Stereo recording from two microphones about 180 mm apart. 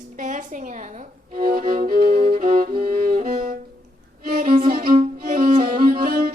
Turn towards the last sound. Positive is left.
turn(degrees=-55)  # may be behind; listen again after turning